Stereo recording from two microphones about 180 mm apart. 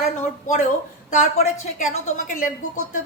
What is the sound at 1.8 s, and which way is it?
Speech, 45° left (ahead or behind).